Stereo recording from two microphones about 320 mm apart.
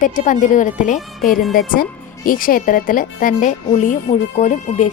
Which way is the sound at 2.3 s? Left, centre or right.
Left.